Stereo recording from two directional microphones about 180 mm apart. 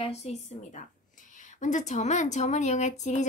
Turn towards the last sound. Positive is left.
turn(degrees=40)  # may be behind; listen again after turning